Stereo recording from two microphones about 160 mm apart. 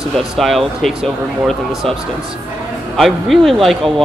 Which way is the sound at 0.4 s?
Centre (ahead or behind).